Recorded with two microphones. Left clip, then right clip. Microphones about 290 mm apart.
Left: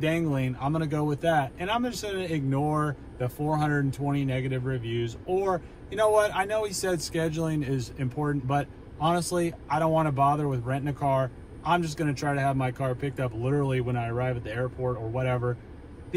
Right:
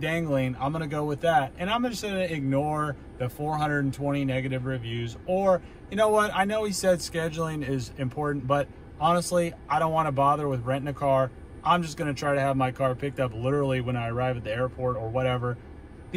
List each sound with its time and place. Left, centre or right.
0.0 s speech: centre